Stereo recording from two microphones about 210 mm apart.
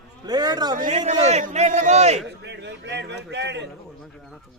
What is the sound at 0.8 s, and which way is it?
A man's voice, 35° right (ahead or behind).